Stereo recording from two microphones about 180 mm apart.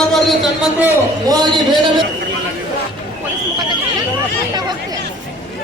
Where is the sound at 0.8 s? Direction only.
10° right (ahead or behind).